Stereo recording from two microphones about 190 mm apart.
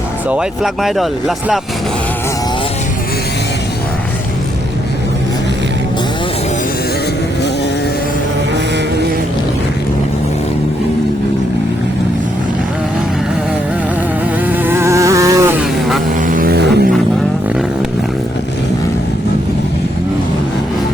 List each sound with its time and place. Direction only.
0.3 s speech: 5° right (ahead or behind)
14.5 s insect: 15° right (ahead or behind)
16.2 s vehicle: 45° right (ahead or behind)